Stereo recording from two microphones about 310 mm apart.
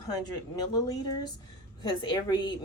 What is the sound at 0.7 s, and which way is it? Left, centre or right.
Speech, centre.